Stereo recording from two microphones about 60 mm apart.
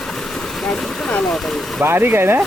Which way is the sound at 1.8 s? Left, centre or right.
Right.